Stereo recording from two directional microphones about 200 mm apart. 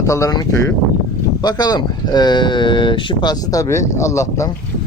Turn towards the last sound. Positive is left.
turn(degrees=15)  # may be behind; listen again after turning